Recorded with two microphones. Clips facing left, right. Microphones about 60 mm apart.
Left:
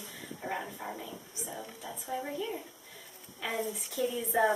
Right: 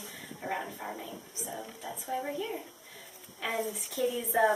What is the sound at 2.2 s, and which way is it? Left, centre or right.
Speech, right.